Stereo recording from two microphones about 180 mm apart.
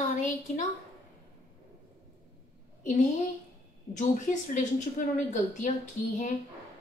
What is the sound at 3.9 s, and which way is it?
Speech, 45° left (ahead or behind).